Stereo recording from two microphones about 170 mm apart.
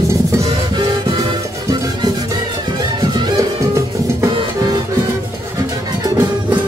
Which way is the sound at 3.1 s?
25° right (ahead or behind).